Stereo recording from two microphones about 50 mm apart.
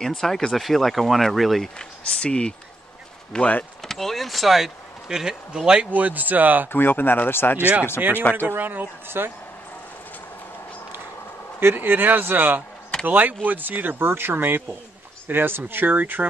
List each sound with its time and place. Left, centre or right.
0.0 s speech: centre
1.8 s speech: centre
3.8 s speech: centre
5.9 s speech: right
6.7 s speech: left
8.2 s speech: left
8.5 s speech: right
11.6 s speech: right